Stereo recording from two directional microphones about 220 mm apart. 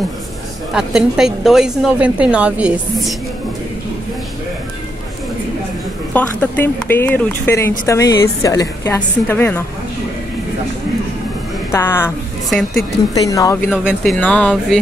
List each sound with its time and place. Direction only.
0.7 s a woman's voice: 5° right (ahead or behind)
6.1 s a woman's voice: 10° left (ahead or behind)
11.7 s a woman's voice: 10° left (ahead or behind)
13.1 s a woman's voice: 15° left (ahead or behind)
13.7 s a woman's voice: centre (ahead or behind)